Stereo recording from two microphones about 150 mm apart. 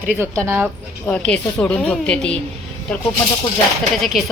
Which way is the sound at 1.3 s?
10° left (ahead or behind).